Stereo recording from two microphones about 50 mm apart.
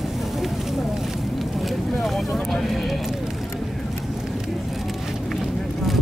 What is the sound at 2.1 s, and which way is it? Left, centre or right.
Vehicle, centre.